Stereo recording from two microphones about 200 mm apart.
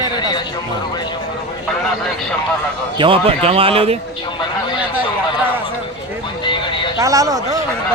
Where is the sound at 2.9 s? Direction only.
25° right (ahead or behind).